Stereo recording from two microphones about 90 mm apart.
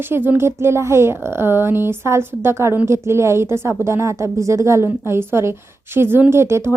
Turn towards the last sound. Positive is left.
turn(degrees=-30)  # may be behind; listen again after turning